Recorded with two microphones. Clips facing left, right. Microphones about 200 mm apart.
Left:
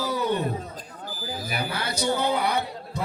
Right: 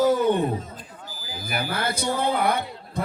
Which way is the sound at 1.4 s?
50° right (ahead or behind).